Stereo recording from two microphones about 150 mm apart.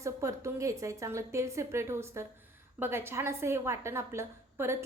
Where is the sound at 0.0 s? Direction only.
20° right (ahead or behind).